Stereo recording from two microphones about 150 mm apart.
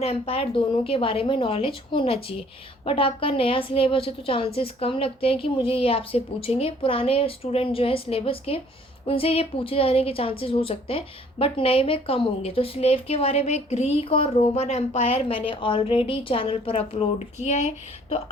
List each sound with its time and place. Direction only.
0.0 s a woman's voice: 40° left (ahead or behind)